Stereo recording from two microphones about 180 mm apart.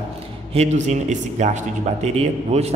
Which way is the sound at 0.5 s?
40° right (ahead or behind).